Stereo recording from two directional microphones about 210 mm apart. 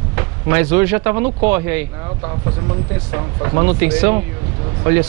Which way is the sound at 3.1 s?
20° right (ahead or behind).